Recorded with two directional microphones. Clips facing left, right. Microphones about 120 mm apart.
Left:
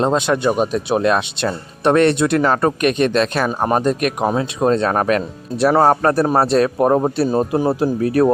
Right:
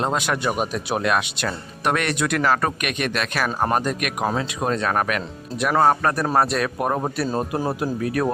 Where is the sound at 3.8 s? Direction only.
30° left (ahead or behind).